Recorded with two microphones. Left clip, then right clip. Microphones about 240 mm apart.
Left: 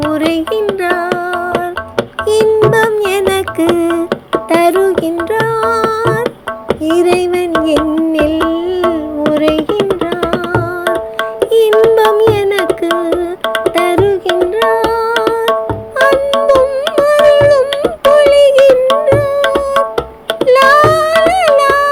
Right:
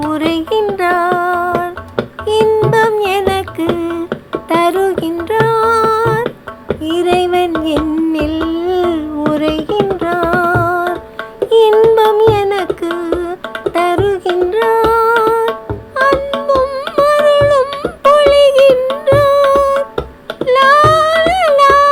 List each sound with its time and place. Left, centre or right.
0.1 s child singing: centre
1.5 s tabla: centre
2.5 s music: centre
6.2 s music: centre
9.6 s music: centre
11.5 s a sound: centre
12.6 s music: centre
16.0 s music: centre
16.8 s carnatic music: centre
19.0 s music: centre
20.4 s music: centre